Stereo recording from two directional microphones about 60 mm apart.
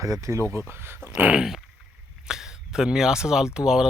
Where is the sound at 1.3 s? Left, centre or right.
Centre.